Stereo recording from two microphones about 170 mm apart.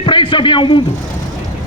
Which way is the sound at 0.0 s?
30° left (ahead or behind).